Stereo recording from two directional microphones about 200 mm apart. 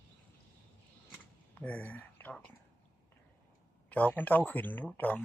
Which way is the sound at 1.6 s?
5° left (ahead or behind).